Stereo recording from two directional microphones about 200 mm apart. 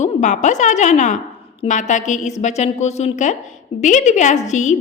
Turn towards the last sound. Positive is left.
turn(degrees=35)  # may be behind; listen again after turning